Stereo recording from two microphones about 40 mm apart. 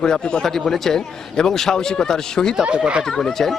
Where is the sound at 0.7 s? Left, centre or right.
Centre.